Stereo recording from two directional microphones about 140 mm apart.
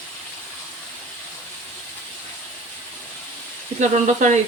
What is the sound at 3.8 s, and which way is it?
Speech, 60° right (ahead or behind).